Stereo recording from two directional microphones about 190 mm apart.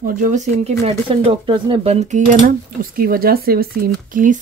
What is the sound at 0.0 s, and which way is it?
Speech, 45° right (ahead or behind).